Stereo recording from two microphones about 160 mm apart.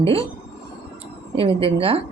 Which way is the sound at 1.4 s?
35° right (ahead or behind).